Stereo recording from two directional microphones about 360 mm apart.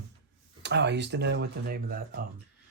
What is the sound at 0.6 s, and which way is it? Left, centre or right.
Speech, right.